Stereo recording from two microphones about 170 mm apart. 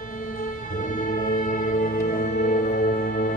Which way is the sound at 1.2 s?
50° left (ahead or behind).